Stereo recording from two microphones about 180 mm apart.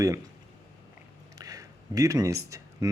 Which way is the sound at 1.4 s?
20° right (ahead or behind).